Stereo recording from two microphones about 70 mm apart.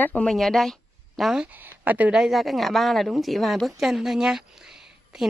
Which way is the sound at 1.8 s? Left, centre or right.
Right.